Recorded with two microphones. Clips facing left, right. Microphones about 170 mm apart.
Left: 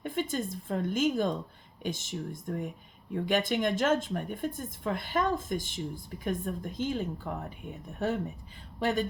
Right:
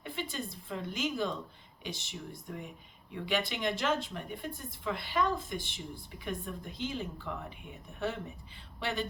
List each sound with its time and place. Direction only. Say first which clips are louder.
0.0 s speech: left 7 dB; 45° left (ahead or behind)